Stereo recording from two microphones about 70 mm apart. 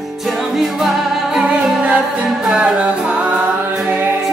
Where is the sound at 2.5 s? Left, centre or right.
Centre.